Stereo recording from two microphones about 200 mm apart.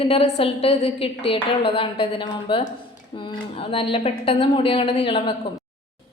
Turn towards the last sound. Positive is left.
turn(degrees=25)  # may be behind; listen again after turning